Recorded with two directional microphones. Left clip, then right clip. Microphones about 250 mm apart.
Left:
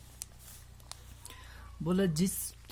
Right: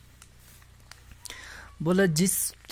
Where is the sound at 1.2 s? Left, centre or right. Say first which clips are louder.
Right 9 dB; right.